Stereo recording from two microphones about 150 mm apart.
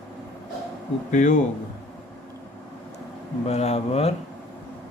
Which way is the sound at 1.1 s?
55° left (ahead or behind).